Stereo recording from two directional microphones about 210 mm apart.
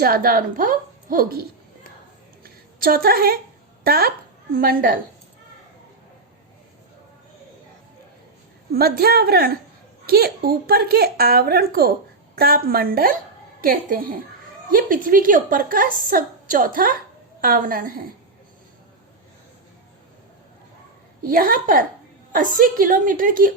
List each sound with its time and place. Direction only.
0.0 s speech: 45° right (ahead or behind)
2.4 s a sound: 45° right (ahead or behind)
3.8 s speech: 45° right (ahead or behind)
8.7 s a woman's voice: 50° right (ahead or behind)
21.2 s a woman's voice: 40° right (ahead or behind)